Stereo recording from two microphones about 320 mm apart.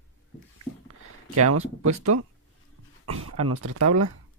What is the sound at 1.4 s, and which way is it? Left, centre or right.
Speech, right.